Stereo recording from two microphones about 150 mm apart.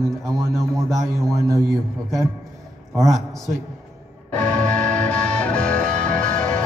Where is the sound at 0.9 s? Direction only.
20° right (ahead or behind).